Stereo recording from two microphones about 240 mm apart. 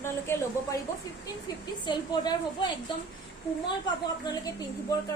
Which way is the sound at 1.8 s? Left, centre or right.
Centre.